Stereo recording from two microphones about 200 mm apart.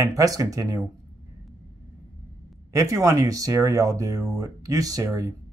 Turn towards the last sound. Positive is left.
turn(degrees=-15)  # may be behind; listen again after turning